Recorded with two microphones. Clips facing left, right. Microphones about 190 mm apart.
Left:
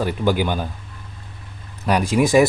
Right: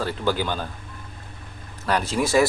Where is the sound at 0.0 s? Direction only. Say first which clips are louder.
Left 4 dB; 15° left (ahead or behind).